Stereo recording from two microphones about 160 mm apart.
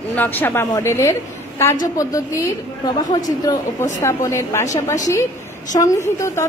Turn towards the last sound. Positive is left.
turn(degrees=20)  # may be behind; listen again after turning